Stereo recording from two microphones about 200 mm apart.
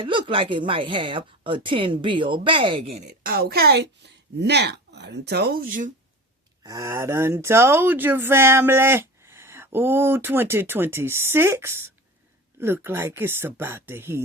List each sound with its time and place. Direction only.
0.0 s a woman's voice: 25° right (ahead or behind)
3.2 s a woman's voice: 50° right (ahead or behind)
6.6 s speech: 15° right (ahead or behind)